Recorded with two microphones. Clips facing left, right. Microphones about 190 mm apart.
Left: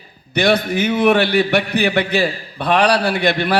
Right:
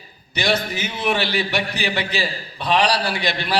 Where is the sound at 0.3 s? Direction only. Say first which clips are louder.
Left 7 dB; 55° left (ahead or behind).